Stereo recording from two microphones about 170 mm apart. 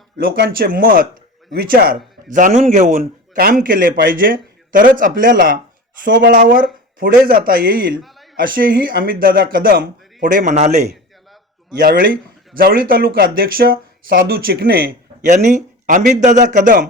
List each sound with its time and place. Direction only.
0.2 s speech: 65° right (ahead or behind)
2.3 s a man's voice: 45° right (ahead or behind)
3.3 s speech: 55° right (ahead or behind)
6.1 s speech: 80° right
10.2 s a man's voice: 45° right (ahead or behind)
11.8 s speech: 60° right (ahead or behind)